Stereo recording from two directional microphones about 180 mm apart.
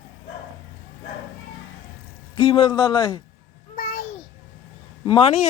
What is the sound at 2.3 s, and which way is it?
Speech, 30° left (ahead or behind).